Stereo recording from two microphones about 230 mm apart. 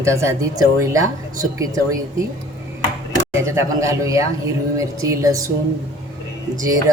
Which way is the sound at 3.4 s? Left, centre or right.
Centre.